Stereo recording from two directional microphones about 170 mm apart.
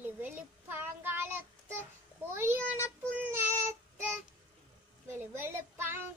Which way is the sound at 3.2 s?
15° right (ahead or behind).